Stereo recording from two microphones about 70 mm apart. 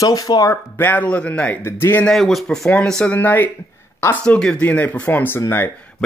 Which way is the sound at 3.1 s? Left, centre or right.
Left.